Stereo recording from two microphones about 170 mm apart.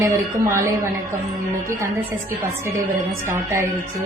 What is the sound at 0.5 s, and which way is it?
Speech, 15° right (ahead or behind).